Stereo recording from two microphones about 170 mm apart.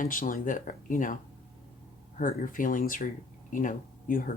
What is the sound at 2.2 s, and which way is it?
Speech, 50° left (ahead or behind).